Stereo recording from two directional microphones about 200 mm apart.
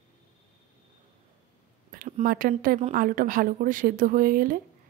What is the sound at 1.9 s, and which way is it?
A woman's voice, 45° right (ahead or behind).